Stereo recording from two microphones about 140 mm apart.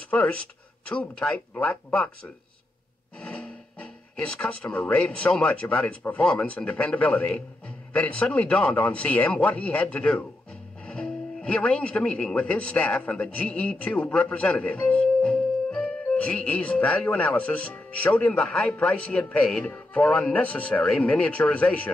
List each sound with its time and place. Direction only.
0.1 s speech: 10° left (ahead or behind)
3.2 s speech: 10° left (ahead or behind)